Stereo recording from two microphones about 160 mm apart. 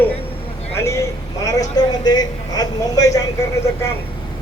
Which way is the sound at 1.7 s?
25° left (ahead or behind).